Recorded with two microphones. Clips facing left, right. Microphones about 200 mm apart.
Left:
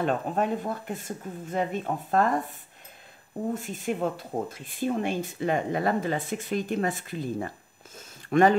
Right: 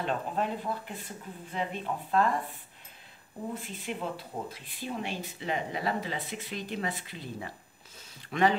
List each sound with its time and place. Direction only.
0.0 s speech: 50° left (ahead or behind)
3.5 s speech: 45° left (ahead or behind)